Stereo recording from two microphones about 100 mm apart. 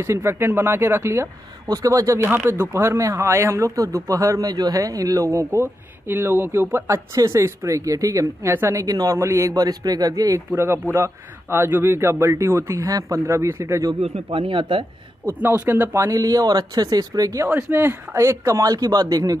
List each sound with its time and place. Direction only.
0.0 s speech: 25° right (ahead or behind)
2.3 s speech: 20° right (ahead or behind)
8.8 s speech: 35° right (ahead or behind)
10.5 s speech: 25° right (ahead or behind)
14.0 s speech: 75° right (ahead or behind); by 14.9 s 55° right (ahead or behind)
15.2 s speech: 20° right (ahead or behind); by 17.5 s 35° right (ahead or behind)
17.5 s speech: 20° right (ahead or behind); by 19.3 s 40° right (ahead or behind)